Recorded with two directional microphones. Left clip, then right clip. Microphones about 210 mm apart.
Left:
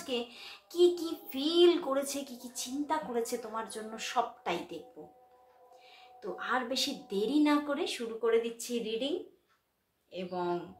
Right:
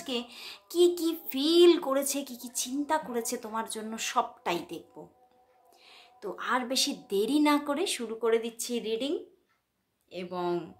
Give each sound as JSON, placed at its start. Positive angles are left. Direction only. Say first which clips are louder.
{"t": 0.0, "sound": "child singing", "louder": "right 1 dB", "side_deg": -50}
{"t": 5.0, "sound": "speech", "louder": "right 2 dB", "side_deg": -55}
{"t": 5.9, "sound": "child singing", "louder": "right 2 dB", "side_deg": -50}
{"t": 10.1, "sound": "child singing", "louder": "right 2 dB", "side_deg": -55}